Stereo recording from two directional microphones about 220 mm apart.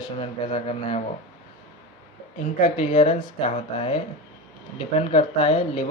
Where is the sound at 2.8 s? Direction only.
30° left (ahead or behind).